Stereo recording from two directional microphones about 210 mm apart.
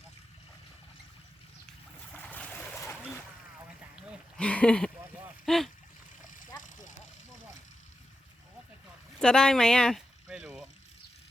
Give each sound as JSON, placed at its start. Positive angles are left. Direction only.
{"t": 2.1, "sound": "a sound", "side_deg": 5}
{"t": 4.4, "sound": "speech", "side_deg": 5}
{"t": 6.3, "sound": "vehicle", "side_deg": 40}
{"t": 9.1, "sound": "boat", "side_deg": 5}